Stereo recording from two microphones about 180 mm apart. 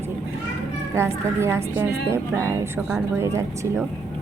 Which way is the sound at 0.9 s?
15° right (ahead or behind).